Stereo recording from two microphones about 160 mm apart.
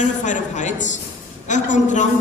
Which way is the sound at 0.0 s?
50° left (ahead or behind).